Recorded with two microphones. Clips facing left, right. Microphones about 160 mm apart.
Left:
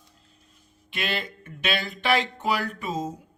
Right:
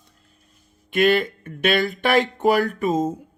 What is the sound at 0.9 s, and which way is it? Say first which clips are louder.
Speech: right 13 dB; 50° right (ahead or behind).